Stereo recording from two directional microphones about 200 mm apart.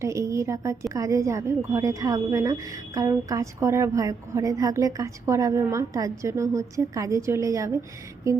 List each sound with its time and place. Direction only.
0.0 s a woman's voice: 15° right (ahead or behind)